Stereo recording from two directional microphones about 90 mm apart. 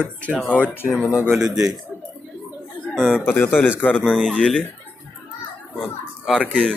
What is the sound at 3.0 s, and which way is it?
Speech, 5° left (ahead or behind).